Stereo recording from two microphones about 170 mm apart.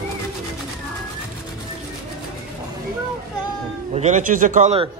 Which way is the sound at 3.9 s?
45° right (ahead or behind).